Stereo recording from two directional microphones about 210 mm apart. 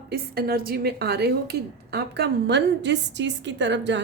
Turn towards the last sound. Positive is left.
turn(degrees=-60)  # may be behind; listen again after turning